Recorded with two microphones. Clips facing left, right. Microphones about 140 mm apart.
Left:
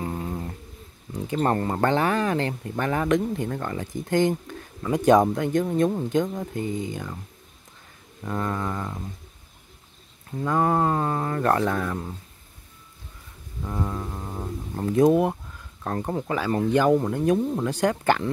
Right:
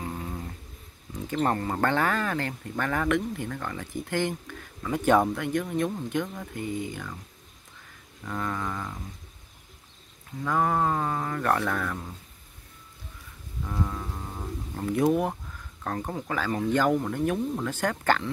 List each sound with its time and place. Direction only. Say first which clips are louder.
0.1 s a sound: left 5 dB; 30° left (ahead or behind)
1.3 s speech: left 3 dB; 30° left (ahead or behind)
1.7 s speech: left 3 dB; 20° left (ahead or behind)
5.4 s speech: left 5 dB; 30° left (ahead or behind)
8.2 s speech: left 4 dB; 25° left (ahead or behind)
10.4 s speech: left 3 dB; 25° left (ahead or behind)
13.7 s music: left 3 dB; 15° left (ahead or behind)
14.8 s speech: left 6 dB; 30° left (ahead or behind)
15.0 s speech: left 3 dB; 20° left (ahead or behind)
17.6 s music: left 5 dB; 15° left (ahead or behind)